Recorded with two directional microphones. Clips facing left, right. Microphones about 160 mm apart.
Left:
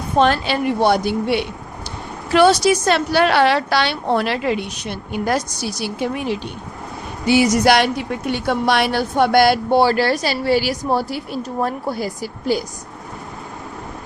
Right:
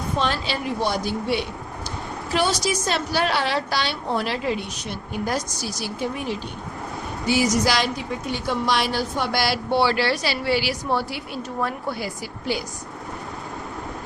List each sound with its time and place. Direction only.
0.2 s a woman's voice: 55° left (ahead or behind); by 12.6 s 40° left (ahead or behind)